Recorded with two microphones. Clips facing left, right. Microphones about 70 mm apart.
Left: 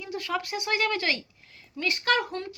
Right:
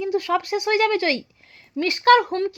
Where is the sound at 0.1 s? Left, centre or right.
Right.